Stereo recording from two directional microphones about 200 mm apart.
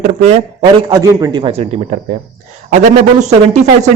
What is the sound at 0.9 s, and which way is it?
A man's voice, 20° right (ahead or behind).